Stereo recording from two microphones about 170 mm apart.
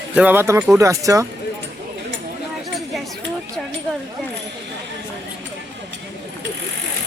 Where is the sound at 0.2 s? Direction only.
10° right (ahead or behind).